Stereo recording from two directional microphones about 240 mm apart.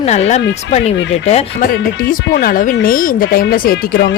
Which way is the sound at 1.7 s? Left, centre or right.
Left.